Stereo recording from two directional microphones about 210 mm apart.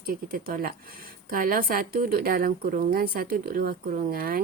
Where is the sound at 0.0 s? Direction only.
45° right (ahead or behind).